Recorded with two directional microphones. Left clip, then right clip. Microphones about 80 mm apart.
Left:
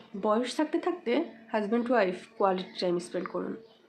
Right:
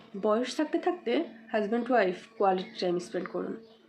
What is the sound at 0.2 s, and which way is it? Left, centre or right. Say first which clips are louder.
A woman's voice: even; left.